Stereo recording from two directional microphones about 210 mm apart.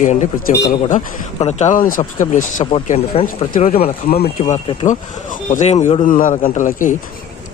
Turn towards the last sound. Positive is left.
turn(degrees=40)  # may be behind; listen again after turning